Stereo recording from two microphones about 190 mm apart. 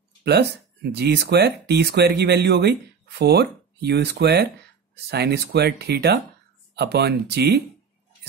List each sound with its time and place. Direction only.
0.2 s speech: 60° right (ahead or behind)